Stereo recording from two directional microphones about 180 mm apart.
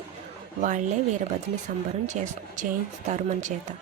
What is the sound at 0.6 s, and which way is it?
Speech, 45° right (ahead or behind).